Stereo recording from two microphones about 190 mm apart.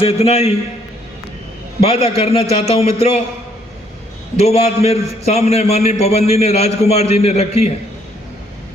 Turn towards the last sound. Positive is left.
turn(degrees=35)  # may be behind; listen again after turning